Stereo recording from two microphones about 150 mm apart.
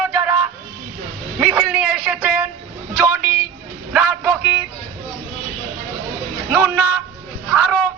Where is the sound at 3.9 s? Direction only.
10° right (ahead or behind).